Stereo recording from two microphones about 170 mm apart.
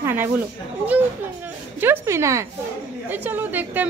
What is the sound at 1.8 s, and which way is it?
Speech, 15° right (ahead or behind).